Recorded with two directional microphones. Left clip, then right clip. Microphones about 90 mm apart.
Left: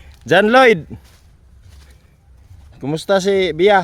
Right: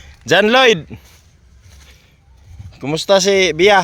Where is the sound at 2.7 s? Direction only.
50° left (ahead or behind).